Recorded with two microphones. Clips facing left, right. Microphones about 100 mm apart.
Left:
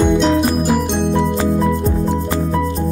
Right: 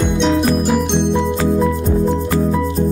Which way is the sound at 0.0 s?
Centre (ahead or behind).